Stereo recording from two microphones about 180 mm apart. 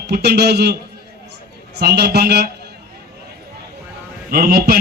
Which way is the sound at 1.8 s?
65° right (ahead or behind).